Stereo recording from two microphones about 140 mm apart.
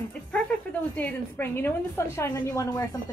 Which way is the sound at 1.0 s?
15° left (ahead or behind).